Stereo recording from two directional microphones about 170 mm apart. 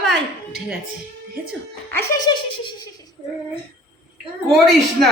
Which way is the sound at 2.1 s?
25° left (ahead or behind).